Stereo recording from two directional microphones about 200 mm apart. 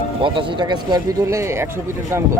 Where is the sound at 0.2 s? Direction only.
25° right (ahead or behind).